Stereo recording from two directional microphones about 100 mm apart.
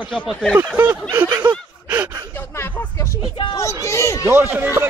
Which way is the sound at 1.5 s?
15° right (ahead or behind).